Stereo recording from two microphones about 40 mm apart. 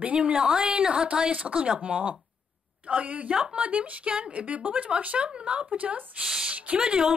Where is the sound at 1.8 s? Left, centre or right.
Right.